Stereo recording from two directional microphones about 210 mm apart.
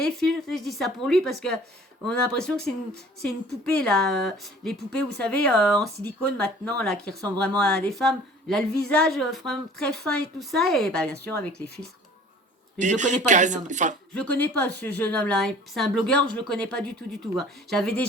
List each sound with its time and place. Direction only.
0.0 s a woman's voice: centre (ahead or behind)
12.8 s speech: 35° right (ahead or behind)
14.1 s a woman's voice: 5° left (ahead or behind)